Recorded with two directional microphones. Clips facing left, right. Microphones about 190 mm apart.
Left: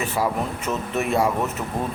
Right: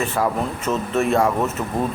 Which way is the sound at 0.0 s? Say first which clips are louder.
Right 2 dB; 10° left (ahead or behind).